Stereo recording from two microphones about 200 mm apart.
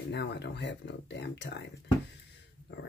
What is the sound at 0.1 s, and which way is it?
Speech, 55° left (ahead or behind).